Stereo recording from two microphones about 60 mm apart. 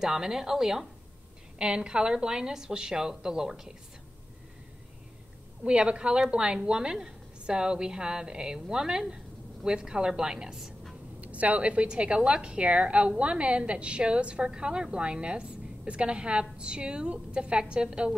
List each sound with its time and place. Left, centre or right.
0.0 s a woman's voice: centre
5.6 s a woman's voice: centre
11.1 s a woman's voice: right